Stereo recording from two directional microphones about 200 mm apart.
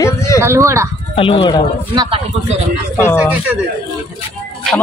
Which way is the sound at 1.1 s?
25° left (ahead or behind).